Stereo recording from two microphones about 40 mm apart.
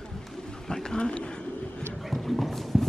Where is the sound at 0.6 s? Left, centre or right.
Centre.